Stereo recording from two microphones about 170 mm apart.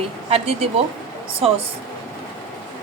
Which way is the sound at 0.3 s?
35° right (ahead or behind).